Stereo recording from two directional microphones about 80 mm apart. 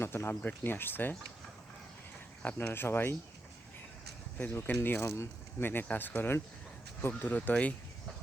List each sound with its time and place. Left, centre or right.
0.0 s speech: left
2.4 s speech: left
4.4 s speech: left